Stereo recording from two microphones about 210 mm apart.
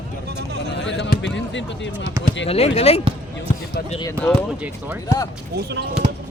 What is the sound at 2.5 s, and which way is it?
Speech, 30° left (ahead or behind).